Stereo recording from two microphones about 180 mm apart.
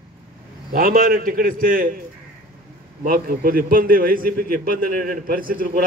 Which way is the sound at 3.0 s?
55° right (ahead or behind).